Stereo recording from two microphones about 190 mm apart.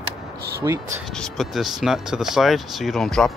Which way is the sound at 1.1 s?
Centre (ahead or behind).